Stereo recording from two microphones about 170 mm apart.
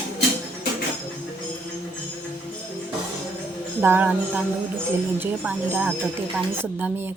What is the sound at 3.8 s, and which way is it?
Speech, 10° right (ahead or behind).